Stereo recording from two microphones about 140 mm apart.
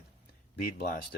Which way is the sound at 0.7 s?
90° left.